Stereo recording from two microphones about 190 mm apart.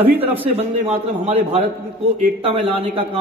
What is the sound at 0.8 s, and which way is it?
A man's voice, 35° right (ahead or behind).